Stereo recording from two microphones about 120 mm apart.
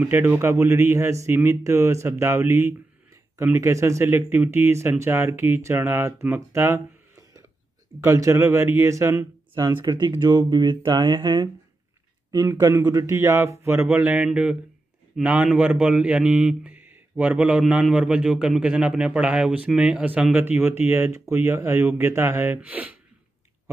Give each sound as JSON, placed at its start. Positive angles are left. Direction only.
{"t": 0.0, "sound": "speech", "side_deg": -15}
{"t": 9.9, "sound": "speech", "side_deg": -40}
{"t": 11.2, "sound": "a man's voice", "side_deg": -25}